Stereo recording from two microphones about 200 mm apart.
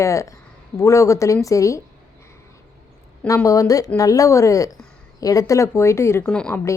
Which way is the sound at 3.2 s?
15° left (ahead or behind).